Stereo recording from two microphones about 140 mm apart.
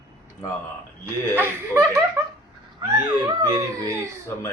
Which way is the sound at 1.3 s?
15° right (ahead or behind).